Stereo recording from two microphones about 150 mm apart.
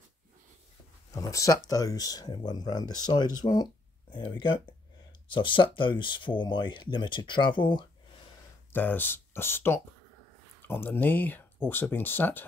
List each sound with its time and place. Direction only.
1.1 s speech: 20° left (ahead or behind)
8.7 s speech: 15° left (ahead or behind)